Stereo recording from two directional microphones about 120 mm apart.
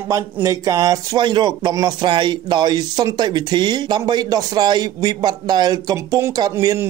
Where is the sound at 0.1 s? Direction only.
25° right (ahead or behind).